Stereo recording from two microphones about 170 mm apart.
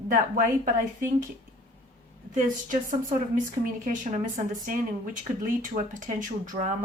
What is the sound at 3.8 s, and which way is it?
A woman's voice, 50° right (ahead or behind).